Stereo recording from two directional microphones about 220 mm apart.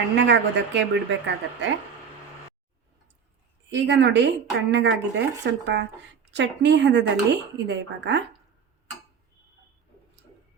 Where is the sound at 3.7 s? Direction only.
50° right (ahead or behind).